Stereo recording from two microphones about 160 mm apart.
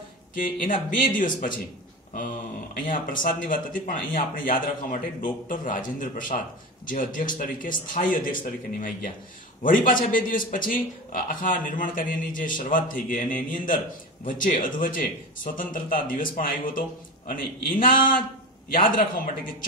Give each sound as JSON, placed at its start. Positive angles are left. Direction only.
{"t": 0.3, "sound": "a man's voice", "side_deg": 55}
{"t": 2.9, "sound": "a man's voice", "side_deg": 60}